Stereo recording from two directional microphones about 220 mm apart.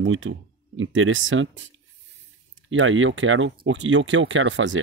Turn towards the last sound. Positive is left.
turn(degrees=-55)  # may be behind; listen again after turning